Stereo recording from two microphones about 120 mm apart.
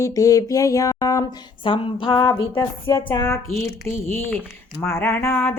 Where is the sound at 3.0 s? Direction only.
35° left (ahead or behind).